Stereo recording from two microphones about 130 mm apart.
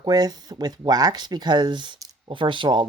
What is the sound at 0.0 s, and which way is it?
Speech, 30° right (ahead or behind).